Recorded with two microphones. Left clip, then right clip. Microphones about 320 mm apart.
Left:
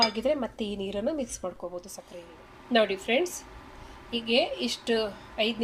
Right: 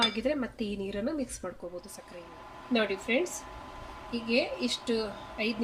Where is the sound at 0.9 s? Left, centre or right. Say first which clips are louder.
Left 5 dB; left.